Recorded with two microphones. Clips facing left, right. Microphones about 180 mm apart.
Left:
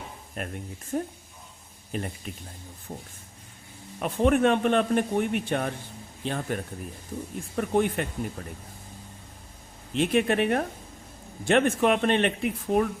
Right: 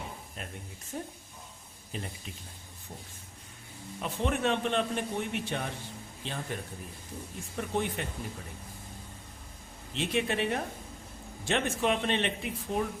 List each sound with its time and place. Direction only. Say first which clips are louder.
0.4 s a man's voice: left 8 dB; 60° left (ahead or behind)
4.0 s a man's voice: left 8 dB; 55° left (ahead or behind)
9.9 s a man's voice: left 7 dB; 55° left (ahead or behind)